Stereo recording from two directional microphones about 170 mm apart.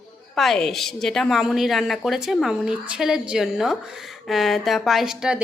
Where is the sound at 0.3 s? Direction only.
Centre (ahead or behind).